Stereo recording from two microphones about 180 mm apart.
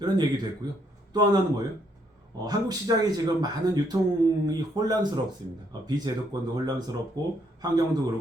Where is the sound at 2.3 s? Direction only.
20° right (ahead or behind).